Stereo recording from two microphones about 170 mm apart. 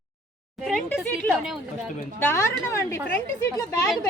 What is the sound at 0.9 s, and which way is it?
Speech, 5° right (ahead or behind).